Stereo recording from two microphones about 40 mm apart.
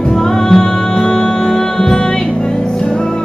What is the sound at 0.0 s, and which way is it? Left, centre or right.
Music, centre.